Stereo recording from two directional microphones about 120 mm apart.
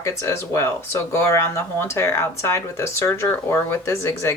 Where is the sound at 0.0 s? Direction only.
25° left (ahead or behind).